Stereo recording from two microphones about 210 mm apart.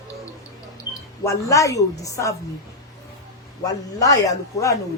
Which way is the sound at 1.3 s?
15° left (ahead or behind).